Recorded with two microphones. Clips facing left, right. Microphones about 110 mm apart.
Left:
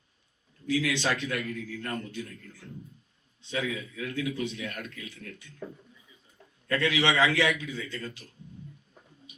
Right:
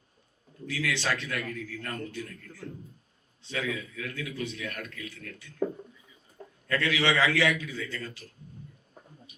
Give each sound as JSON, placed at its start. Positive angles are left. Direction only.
{"t": 0.7, "sound": "a man's voice", "side_deg": 20}
{"t": 3.4, "sound": "a man's voice", "side_deg": 20}
{"t": 6.7, "sound": "a man's voice", "side_deg": 20}